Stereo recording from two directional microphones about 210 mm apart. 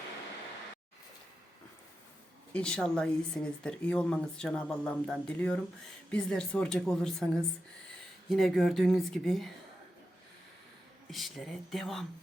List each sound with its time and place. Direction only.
2.5 s speech: 5° left (ahead or behind)
11.1 s speech: centre (ahead or behind)